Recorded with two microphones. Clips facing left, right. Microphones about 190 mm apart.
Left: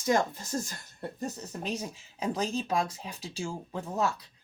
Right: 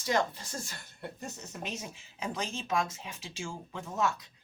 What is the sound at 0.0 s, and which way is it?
Speech, 45° left (ahead or behind).